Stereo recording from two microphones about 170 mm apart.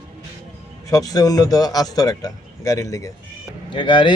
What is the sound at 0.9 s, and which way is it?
Speech, 20° left (ahead or behind).